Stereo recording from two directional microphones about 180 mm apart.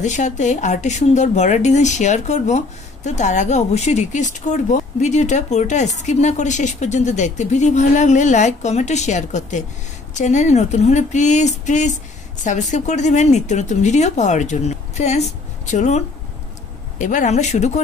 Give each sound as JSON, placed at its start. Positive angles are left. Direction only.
{"t": 0.0, "sound": "speech", "side_deg": 40}
{"t": 17.0, "sound": "speech", "side_deg": 45}